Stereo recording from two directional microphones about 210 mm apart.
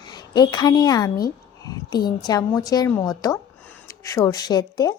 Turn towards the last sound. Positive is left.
turn(degrees=20)  # may be behind; listen again after turning